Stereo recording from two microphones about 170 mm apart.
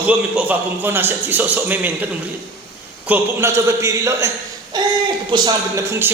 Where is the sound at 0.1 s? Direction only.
10° right (ahead or behind).